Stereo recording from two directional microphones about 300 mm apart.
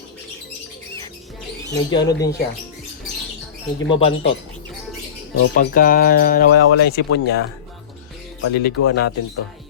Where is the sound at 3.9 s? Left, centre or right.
Centre.